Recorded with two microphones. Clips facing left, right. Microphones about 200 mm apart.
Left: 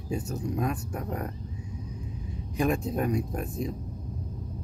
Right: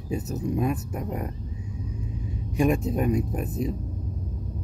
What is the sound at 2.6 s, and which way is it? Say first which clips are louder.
Speech: right 4 dB; 5° right (ahead or behind).